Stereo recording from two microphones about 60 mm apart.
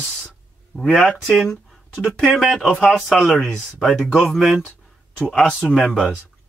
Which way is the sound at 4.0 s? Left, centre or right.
Centre.